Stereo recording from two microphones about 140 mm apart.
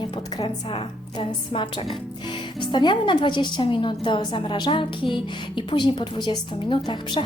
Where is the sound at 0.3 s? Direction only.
35° left (ahead or behind).